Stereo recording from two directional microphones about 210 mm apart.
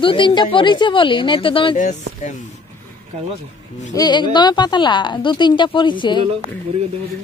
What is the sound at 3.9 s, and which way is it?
Speech, 20° left (ahead or behind).